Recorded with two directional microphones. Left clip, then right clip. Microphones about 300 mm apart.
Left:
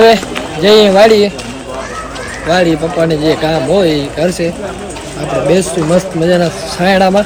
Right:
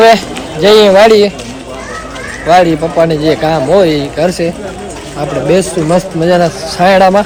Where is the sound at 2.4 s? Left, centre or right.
Centre.